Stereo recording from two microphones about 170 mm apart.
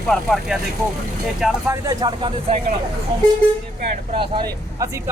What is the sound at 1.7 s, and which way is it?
Speech, 20° right (ahead or behind).